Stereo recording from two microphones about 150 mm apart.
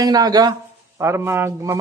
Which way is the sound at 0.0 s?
25° right (ahead or behind).